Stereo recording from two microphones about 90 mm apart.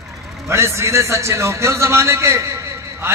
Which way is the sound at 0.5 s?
30° right (ahead or behind).